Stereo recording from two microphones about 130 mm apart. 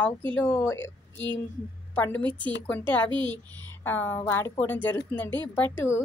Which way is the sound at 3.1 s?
40° right (ahead or behind).